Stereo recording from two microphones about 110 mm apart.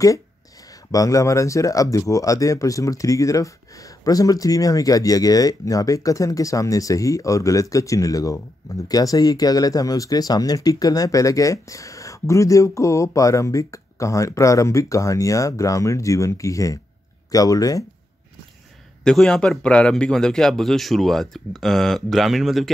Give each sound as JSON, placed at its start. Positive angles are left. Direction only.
{"t": 0.9, "sound": "speech", "side_deg": 30}
{"t": 19.0, "sound": "a man's voice", "side_deg": 5}